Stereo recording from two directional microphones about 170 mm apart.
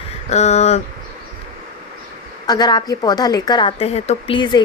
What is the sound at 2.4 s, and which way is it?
A woman's voice, 25° left (ahead or behind).